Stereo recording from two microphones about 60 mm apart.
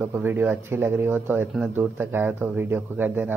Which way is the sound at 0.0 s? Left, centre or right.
Right.